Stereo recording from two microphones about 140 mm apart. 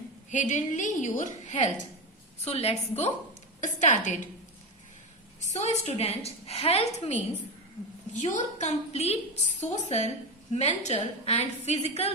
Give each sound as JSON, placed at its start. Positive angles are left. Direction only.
{"t": 0.3, "sound": "a woman's voice", "side_deg": 60}
{"t": 3.6, "sound": "a woman's voice", "side_deg": 60}
{"t": 5.5, "sound": "a woman's voice", "side_deg": 50}
{"t": 8.1, "sound": "a woman's voice", "side_deg": 60}